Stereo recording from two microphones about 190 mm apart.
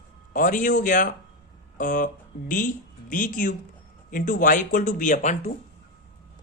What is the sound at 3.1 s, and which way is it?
A woman's voice, 45° left (ahead or behind).